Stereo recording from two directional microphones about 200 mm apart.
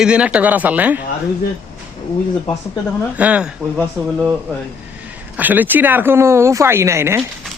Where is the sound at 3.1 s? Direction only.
5° right (ahead or behind).